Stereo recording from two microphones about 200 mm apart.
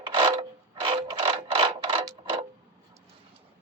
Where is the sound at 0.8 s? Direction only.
25° right (ahead or behind).